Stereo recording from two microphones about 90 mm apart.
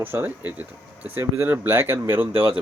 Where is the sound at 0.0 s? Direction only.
25° right (ahead or behind).